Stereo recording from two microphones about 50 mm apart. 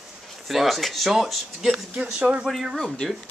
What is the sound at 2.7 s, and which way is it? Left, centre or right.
Speech, centre.